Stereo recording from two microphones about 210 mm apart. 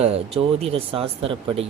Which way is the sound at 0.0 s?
30° right (ahead or behind).